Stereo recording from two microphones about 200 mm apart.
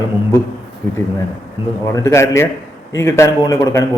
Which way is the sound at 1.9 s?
15° left (ahead or behind).